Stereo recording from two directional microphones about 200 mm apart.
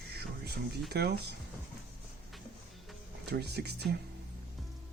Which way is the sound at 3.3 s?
55° right (ahead or behind).